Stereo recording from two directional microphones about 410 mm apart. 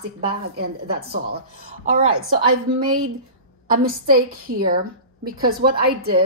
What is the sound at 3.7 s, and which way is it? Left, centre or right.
A woman's voice, right.